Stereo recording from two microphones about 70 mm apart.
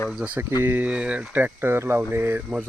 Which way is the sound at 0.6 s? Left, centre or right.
Right.